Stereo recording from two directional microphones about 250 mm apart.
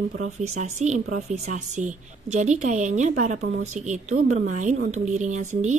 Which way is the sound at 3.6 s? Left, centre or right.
Right.